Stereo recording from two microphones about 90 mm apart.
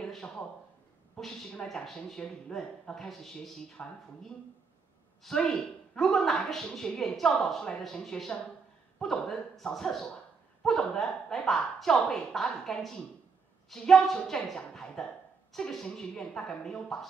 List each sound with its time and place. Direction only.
0.0 s a woman's voice: 5° left (ahead or behind)